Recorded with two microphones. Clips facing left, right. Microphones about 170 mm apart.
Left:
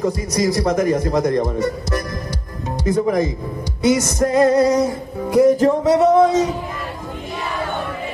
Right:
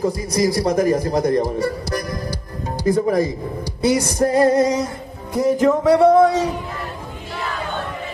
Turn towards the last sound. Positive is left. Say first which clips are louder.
# even
turn(degrees=20)  # may be behind; listen again after turning